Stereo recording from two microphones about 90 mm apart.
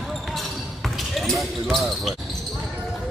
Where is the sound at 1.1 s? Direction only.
Centre (ahead or behind).